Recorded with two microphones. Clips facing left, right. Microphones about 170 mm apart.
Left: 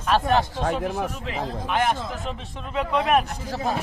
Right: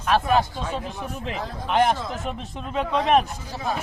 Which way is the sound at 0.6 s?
70° left (ahead or behind).